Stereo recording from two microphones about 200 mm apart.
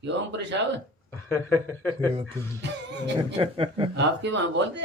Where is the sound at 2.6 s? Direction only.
60° right (ahead or behind).